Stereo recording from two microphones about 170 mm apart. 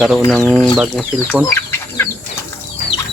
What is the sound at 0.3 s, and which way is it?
Speech, 5° left (ahead or behind).